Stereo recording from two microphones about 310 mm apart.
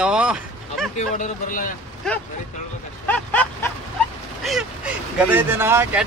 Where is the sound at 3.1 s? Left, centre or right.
Centre.